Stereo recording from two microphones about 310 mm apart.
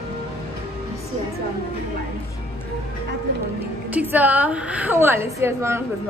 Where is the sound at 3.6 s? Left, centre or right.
Centre.